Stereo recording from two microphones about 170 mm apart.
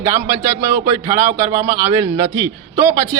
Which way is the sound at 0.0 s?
15° right (ahead or behind).